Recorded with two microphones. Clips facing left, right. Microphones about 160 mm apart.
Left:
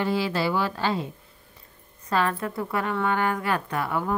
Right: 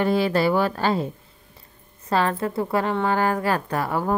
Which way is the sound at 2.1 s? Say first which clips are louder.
Right 3 dB; 30° right (ahead or behind).